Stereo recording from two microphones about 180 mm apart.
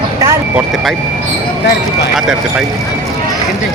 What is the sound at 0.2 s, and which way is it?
Vehicle, 15° right (ahead or behind).